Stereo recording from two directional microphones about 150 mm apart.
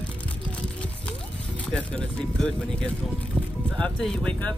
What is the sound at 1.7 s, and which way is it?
Speech, 5° left (ahead or behind).